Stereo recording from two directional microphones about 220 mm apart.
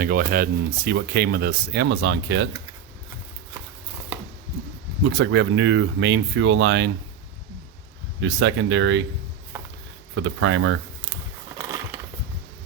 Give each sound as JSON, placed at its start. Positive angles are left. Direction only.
{"t": 0.0, "sound": "speech", "side_deg": -40}
{"t": 5.0, "sound": "speech", "side_deg": -55}
{"t": 8.2, "sound": "speech", "side_deg": -55}
{"t": 10.2, "sound": "speech", "side_deg": -60}